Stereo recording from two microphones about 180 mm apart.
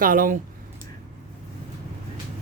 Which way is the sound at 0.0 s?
50° right (ahead or behind).